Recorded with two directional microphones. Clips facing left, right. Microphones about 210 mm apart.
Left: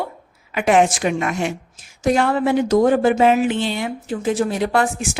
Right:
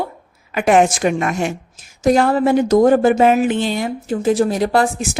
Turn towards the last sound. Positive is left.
turn(degrees=-35)  # may be behind; listen again after turning